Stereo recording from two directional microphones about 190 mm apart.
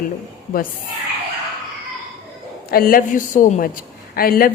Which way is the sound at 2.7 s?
50° left (ahead or behind).